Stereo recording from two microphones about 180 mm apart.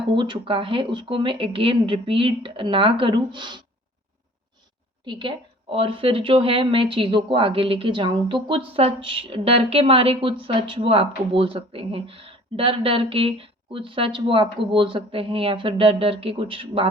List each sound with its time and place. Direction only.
0.2 s speech: 30° right (ahead or behind)
5.0 s speech: 25° right (ahead or behind)